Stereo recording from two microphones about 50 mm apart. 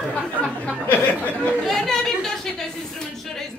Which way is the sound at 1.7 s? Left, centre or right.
Centre.